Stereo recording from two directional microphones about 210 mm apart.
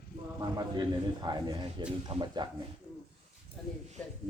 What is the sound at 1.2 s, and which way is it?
Speech, 20° right (ahead or behind).